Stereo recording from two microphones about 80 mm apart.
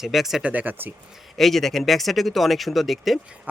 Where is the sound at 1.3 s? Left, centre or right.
Centre.